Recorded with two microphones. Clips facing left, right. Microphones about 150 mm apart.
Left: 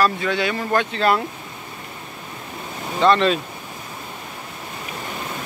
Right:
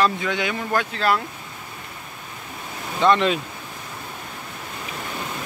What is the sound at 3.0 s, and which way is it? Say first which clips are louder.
Speech: left 2 dB; 10° right (ahead or behind).